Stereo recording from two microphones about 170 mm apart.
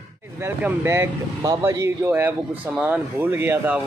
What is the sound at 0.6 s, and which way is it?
A man's voice, 15° right (ahead or behind).